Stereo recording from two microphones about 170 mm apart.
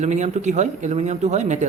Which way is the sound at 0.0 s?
45° right (ahead or behind).